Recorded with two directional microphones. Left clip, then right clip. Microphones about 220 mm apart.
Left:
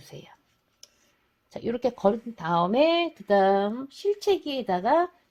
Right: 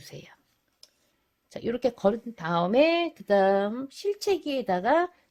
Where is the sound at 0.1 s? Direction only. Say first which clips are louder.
Left 2 dB; 15° right (ahead or behind).